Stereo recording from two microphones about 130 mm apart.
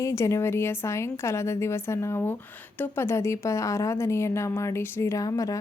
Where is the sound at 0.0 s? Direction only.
25° left (ahead or behind).